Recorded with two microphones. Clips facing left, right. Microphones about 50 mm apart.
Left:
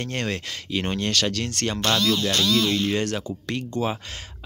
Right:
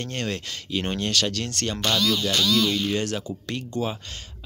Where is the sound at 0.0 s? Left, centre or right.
Centre.